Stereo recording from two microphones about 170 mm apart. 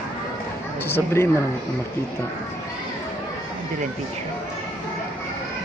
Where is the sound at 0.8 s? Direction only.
15° left (ahead or behind).